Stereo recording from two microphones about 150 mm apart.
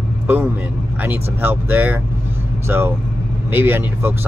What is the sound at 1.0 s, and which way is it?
Speech, 15° right (ahead or behind).